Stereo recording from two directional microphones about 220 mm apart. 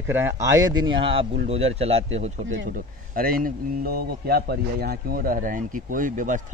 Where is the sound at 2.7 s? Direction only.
40° right (ahead or behind).